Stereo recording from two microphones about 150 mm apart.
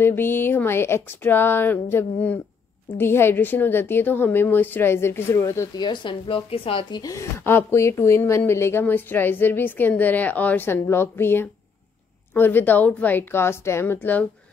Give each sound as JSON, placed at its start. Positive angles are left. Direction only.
{"t": 0.0, "sound": "speech", "side_deg": 15}
{"t": 7.0, "sound": "speech", "side_deg": 20}